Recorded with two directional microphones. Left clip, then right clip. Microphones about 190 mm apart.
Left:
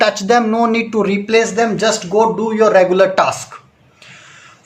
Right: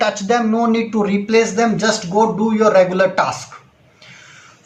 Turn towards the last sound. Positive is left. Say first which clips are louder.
# left 4 dB
turn(degrees=45)  # may be behind; listen again after turning